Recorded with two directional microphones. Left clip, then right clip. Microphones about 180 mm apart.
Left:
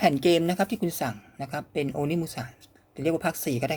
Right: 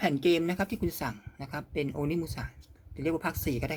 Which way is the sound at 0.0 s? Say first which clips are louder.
Left 5 dB; 20° left (ahead or behind).